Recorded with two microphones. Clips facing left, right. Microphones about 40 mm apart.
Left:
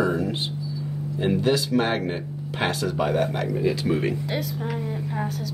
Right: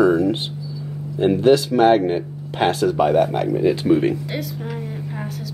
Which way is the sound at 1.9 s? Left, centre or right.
Centre.